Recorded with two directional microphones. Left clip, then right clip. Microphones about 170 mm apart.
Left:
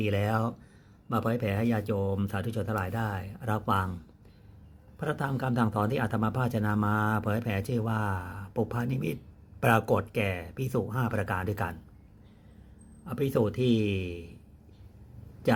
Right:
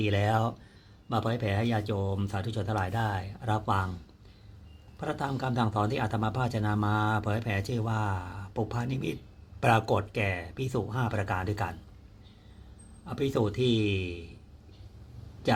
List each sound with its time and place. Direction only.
0.0 s speech: 5° left (ahead or behind)
4.9 s a man's voice: 10° left (ahead or behind)
13.1 s a man's voice: 10° left (ahead or behind)